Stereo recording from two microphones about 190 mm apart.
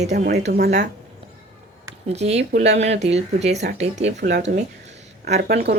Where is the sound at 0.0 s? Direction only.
35° right (ahead or behind).